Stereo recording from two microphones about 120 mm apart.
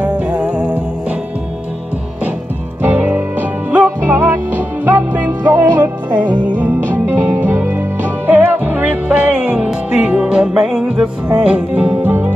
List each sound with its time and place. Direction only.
0.0 s music: 10° right (ahead or behind)
2.8 s music: 20° right (ahead or behind)